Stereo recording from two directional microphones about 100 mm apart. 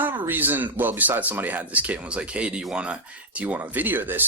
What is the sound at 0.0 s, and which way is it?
Speech, 20° right (ahead or behind).